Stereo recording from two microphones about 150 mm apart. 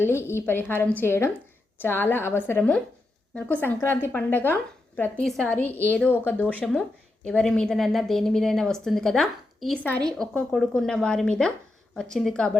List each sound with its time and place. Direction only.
0.0 s a woman's voice: 15° left (ahead or behind)
5.6 s a woman's voice: 15° right (ahead or behind)
5.9 s a woman's voice: 10° left (ahead or behind)